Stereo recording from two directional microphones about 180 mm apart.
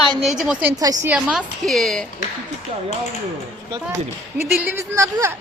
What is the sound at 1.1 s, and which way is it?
Speech, 5° right (ahead or behind).